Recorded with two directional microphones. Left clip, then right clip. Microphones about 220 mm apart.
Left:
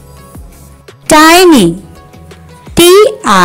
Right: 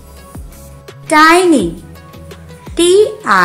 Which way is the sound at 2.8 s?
35° left (ahead or behind).